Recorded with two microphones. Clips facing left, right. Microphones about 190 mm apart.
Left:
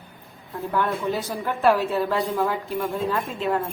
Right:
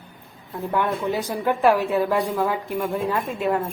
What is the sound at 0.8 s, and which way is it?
A woman's voice, 15° right (ahead or behind).